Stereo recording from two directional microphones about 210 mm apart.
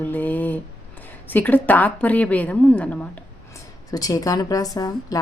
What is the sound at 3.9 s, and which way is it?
A woman's voice, 15° left (ahead or behind).